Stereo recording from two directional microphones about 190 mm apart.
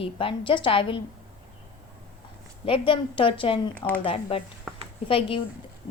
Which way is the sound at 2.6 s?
25° left (ahead or behind).